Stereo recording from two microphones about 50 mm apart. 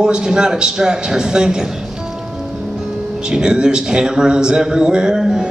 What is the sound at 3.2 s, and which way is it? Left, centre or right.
Speech, centre.